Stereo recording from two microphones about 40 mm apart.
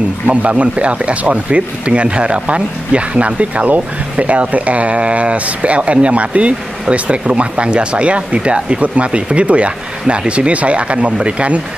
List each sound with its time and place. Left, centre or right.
0.3 s speech: right